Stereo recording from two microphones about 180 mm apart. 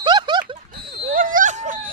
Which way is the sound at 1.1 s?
50° right (ahead or behind).